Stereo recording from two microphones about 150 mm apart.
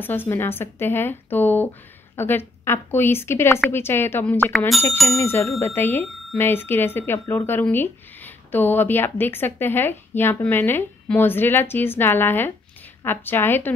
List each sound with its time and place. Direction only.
0.0 s speech: 10° left (ahead or behind)
4.5 s speech: centre (ahead or behind)
5.2 s speech: 15° left (ahead or behind)